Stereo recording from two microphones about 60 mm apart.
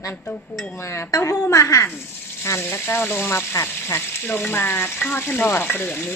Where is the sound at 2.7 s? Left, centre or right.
Left.